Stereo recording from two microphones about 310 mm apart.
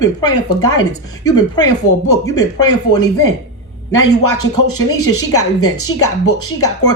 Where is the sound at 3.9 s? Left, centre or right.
Left.